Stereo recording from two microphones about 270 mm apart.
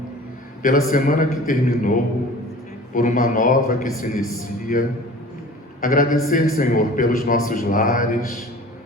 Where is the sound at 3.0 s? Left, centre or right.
Left.